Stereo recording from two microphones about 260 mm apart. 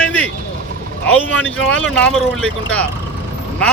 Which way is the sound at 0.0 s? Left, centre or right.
Centre.